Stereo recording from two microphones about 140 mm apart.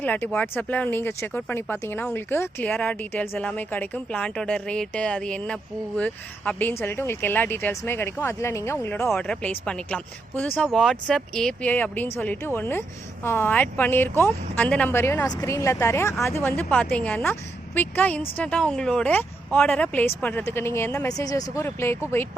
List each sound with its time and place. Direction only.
0.0 s speech: 10° left (ahead or behind)
9.0 s speech: 5° left (ahead or behind)